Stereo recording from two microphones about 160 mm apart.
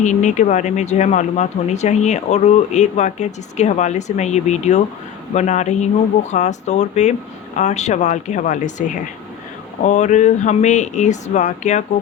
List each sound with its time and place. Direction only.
0.0 s speech: 50° left (ahead or behind)
9.8 s speech: 50° left (ahead or behind)